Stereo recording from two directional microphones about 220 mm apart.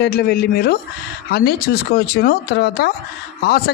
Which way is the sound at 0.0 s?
45° left (ahead or behind).